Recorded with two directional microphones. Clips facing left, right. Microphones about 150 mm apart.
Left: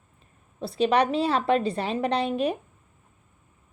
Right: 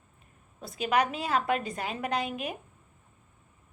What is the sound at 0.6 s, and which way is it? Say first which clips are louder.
Speech: left 5 dB; 30° left (ahead or behind).